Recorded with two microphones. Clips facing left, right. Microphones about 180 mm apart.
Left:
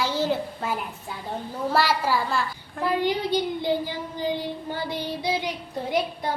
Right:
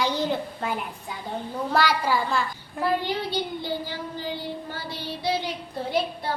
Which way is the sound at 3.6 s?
20° left (ahead or behind).